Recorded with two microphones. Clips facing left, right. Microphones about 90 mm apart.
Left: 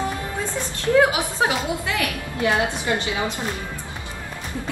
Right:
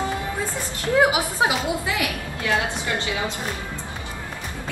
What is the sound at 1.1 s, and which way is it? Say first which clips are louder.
Speech: even; 15° right (ahead or behind).